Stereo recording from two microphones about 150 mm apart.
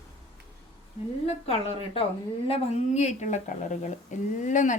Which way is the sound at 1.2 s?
40° left (ahead or behind).